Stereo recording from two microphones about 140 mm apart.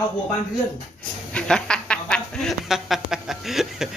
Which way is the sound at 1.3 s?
5° left (ahead or behind).